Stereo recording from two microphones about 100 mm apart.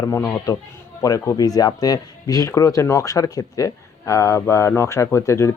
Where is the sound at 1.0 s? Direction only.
35° left (ahead or behind).